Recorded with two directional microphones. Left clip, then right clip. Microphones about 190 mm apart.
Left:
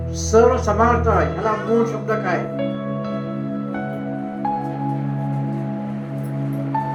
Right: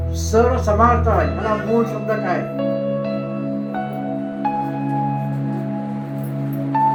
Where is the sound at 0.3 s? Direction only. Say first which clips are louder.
Left 1 dB; 55° left (ahead or behind).